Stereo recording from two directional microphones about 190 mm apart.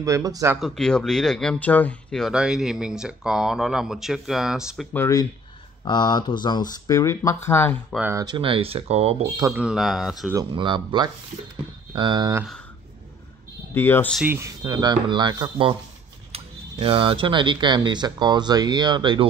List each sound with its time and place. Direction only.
0.0 s speech: 15° right (ahead or behind)
0.6 s speech: 5° left (ahead or behind)
4.9 s speech: 15° left (ahead or behind)
8.0 s speech: 15° right (ahead or behind); by 9.3 s 35° right (ahead or behind)
9.5 s speech: 5° right (ahead or behind)
10.5 s speech: 25° right (ahead or behind)
13.7 s speech: 10° left (ahead or behind)
14.2 s speech: 15° right (ahead or behind)